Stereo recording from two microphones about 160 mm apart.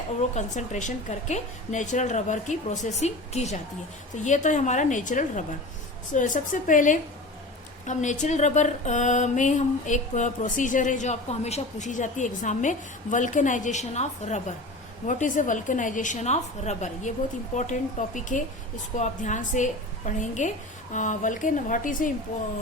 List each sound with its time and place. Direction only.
0.2 s a woman's voice: 45° left (ahead or behind)